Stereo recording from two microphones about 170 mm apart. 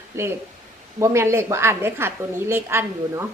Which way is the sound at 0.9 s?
15° right (ahead or behind).